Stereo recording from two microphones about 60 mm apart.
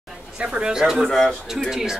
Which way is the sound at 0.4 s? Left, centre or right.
Centre.